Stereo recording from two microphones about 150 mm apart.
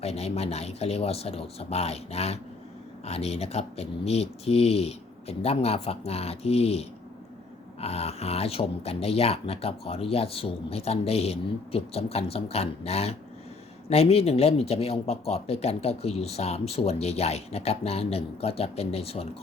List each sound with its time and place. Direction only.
0.0 s speech: 45° left (ahead or behind)